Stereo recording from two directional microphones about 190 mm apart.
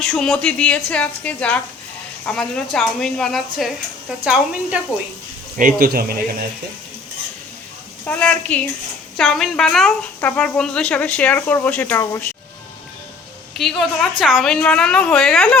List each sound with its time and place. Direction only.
0.0 s a woman's voice: centre (ahead or behind)
5.5 s speech: 45° right (ahead or behind)
8.0 s speech: 5° left (ahead or behind)
13.6 s a woman's voice: centre (ahead or behind)